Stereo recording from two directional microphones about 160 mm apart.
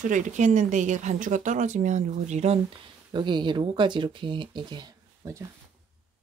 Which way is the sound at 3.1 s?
30° right (ahead or behind).